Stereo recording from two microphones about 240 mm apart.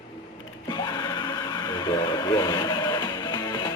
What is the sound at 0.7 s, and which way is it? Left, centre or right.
Music, centre.